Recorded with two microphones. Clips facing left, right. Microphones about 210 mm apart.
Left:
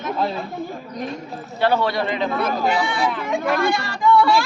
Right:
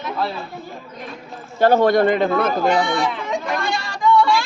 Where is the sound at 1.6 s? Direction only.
45° right (ahead or behind).